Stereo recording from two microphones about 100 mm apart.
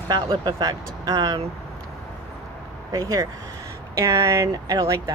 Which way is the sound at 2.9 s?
35° right (ahead or behind).